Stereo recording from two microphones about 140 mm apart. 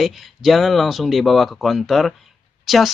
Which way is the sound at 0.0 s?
Centre (ahead or behind).